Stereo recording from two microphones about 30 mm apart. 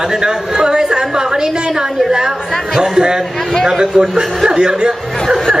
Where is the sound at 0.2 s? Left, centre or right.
Right.